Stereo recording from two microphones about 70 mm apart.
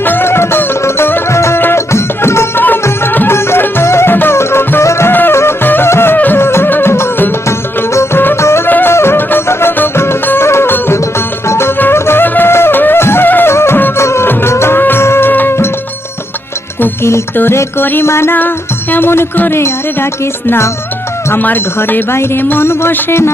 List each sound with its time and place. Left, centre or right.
0.0 s music: left
16.8 s music: left
17.3 s speech: left
21.2 s speech: left